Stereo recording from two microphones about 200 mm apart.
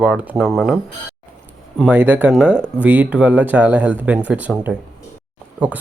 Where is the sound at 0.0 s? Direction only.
5° right (ahead or behind).